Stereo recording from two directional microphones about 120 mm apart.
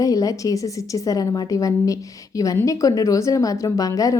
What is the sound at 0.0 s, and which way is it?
A woman's voice, 30° left (ahead or behind).